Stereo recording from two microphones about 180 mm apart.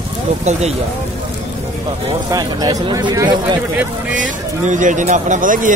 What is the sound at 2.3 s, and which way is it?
Speech, 20° right (ahead or behind).